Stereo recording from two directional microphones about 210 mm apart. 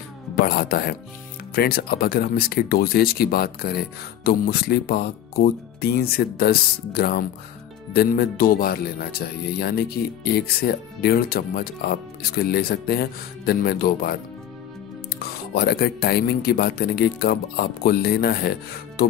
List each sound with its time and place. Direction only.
0.5 s speech: 50° left (ahead or behind)
15.5 s speech: 50° left (ahead or behind)